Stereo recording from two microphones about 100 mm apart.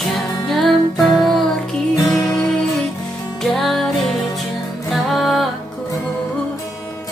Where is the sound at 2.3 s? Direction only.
Centre (ahead or behind).